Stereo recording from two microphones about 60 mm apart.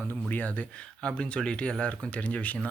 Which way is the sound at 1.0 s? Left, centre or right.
Centre.